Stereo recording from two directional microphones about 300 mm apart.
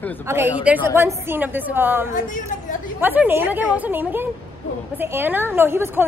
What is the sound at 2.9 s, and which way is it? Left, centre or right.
A woman's voice, centre.